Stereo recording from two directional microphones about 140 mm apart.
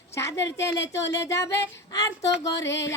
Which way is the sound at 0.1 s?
20° left (ahead or behind).